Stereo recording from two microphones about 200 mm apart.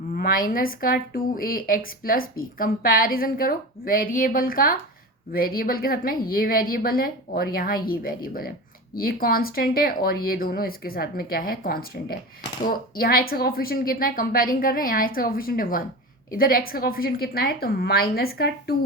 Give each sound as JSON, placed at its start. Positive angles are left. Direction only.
{"t": 0.2, "sound": "speech", "side_deg": 45}